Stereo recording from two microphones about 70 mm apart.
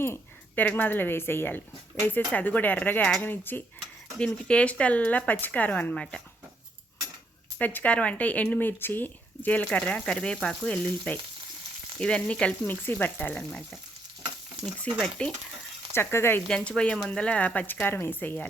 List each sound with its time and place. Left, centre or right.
0.0 s speech: left
4.2 s speech: centre
5.9 s frying: centre
7.6 s speech: left
11.9 s frying: centre
12.6 s speech: left
15.2 s speech: centre
16.0 s speech: left
16.5 s frying: centre
17.1 s speech: centre